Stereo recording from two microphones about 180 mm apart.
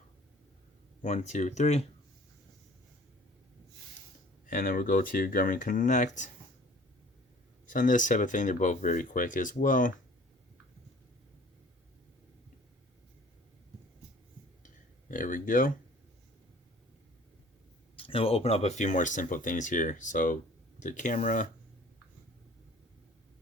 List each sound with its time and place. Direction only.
1.0 s speech: 40° left (ahead or behind)
4.4 s speech: 50° left (ahead or behind)
7.7 s speech: 45° left (ahead or behind)
15.1 s a sound: 50° left (ahead or behind)
17.9 s speech: 30° left (ahead or behind); by 21.4 s 45° left (ahead or behind)